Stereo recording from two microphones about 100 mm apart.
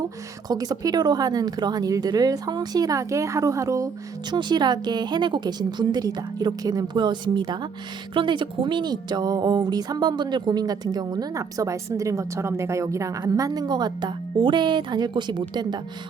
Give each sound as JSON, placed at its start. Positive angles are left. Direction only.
{"t": 0.4, "sound": "speech", "side_deg": -40}
{"t": 4.3, "sound": "speech", "side_deg": -45}